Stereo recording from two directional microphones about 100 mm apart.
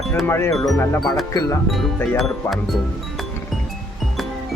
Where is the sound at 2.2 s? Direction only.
Centre (ahead or behind).